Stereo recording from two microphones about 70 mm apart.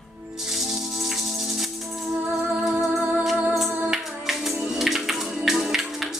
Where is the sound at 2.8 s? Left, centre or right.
Right.